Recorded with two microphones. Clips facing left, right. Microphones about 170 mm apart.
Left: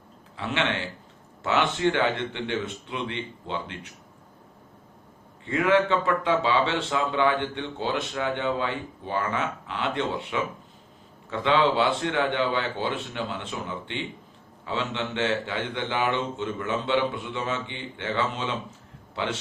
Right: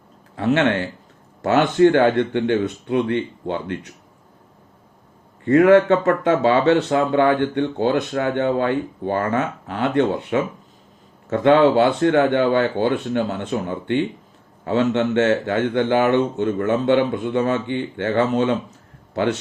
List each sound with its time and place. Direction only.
0.3 s speech: 45° right (ahead or behind)
5.5 s a man's voice: 50° right (ahead or behind)